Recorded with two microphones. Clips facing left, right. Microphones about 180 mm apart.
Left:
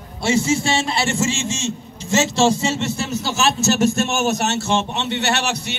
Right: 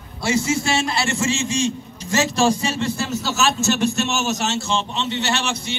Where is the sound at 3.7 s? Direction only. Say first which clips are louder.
Left 3 dB; 45° left (ahead or behind).